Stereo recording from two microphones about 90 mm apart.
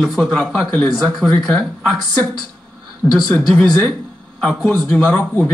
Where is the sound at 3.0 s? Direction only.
10° left (ahead or behind).